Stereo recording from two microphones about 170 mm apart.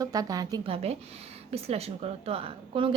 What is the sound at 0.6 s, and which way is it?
A woman's voice, 35° right (ahead or behind).